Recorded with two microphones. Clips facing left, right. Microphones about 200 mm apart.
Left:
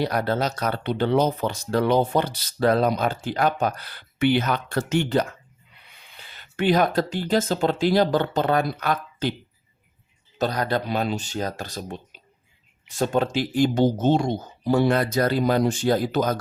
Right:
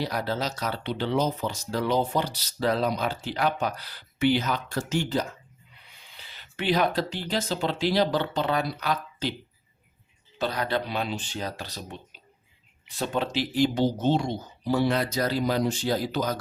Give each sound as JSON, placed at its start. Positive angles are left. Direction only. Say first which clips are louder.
{"t": 0.0, "sound": "speech", "louder": "left 5 dB", "side_deg": 60}
{"t": 6.1, "sound": "speech", "louder": "left 3 dB", "side_deg": 50}
{"t": 10.3, "sound": "speech", "louder": "left 4 dB", "side_deg": 45}